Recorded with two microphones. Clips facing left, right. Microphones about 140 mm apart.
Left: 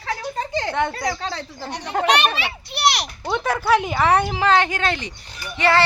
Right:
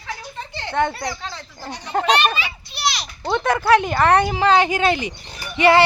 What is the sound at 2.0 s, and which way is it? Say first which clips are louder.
Children playing: even; 70° left (ahead or behind).